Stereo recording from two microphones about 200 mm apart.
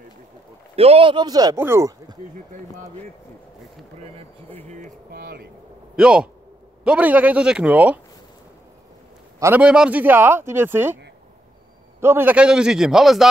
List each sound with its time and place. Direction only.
0.7 s speech: 30° right (ahead or behind)
4.6 s speech: 40° right (ahead or behind)
5.9 s a man's voice: 5° right (ahead or behind)
9.4 s speech: 10° right (ahead or behind)
12.0 s a man's voice: 10° right (ahead or behind)